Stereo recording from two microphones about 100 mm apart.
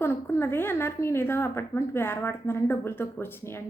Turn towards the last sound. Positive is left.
turn(degrees=25)  # may be behind; listen again after turning